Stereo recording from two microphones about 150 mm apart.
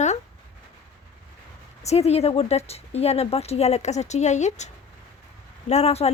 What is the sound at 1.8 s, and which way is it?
A woman's voice, 45° left (ahead or behind).